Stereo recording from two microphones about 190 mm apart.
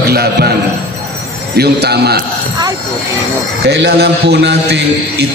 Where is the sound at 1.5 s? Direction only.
60° right (ahead or behind).